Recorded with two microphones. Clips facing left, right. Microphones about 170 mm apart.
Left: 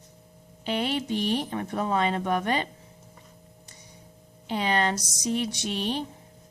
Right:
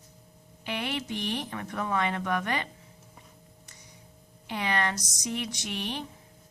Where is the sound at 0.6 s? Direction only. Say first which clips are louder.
Left 5 dB; 30° left (ahead or behind).